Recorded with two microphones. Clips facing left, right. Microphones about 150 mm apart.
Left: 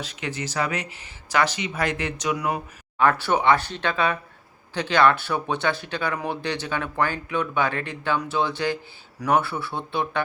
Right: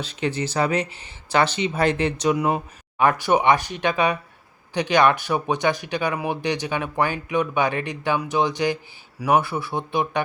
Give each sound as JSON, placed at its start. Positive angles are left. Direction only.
{"t": 0.0, "sound": "speech", "side_deg": -30}
{"t": 3.0, "sound": "speech", "side_deg": -15}